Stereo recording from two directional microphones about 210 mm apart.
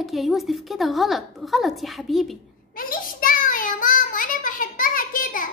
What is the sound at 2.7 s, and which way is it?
Child singing, 40° left (ahead or behind).